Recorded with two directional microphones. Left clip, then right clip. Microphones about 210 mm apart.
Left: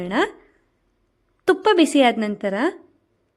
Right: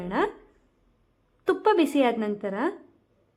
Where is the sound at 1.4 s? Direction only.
30° left (ahead or behind).